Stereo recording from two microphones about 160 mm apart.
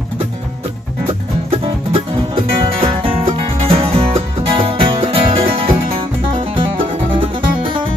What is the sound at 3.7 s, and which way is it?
Music, 35° right (ahead or behind).